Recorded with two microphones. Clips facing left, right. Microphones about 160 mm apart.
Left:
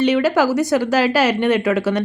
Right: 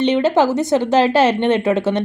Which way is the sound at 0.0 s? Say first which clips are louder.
Right 1 dB; 25° right (ahead or behind).